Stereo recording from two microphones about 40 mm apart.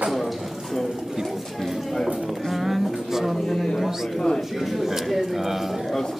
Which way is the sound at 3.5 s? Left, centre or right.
Centre.